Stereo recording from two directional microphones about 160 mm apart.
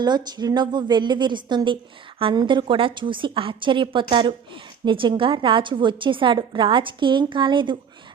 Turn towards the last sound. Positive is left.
turn(degrees=-30)  # may be behind; listen again after turning